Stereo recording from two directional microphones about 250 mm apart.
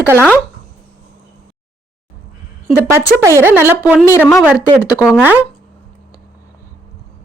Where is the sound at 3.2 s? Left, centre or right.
Centre.